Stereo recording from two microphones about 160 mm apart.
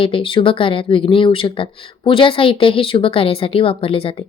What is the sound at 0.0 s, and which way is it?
Speech, 35° left (ahead or behind).